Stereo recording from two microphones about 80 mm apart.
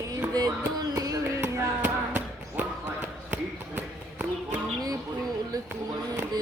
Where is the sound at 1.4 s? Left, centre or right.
Right.